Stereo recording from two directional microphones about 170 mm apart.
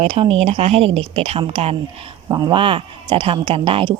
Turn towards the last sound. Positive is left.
turn(degrees=-30)  # may be behind; listen again after turning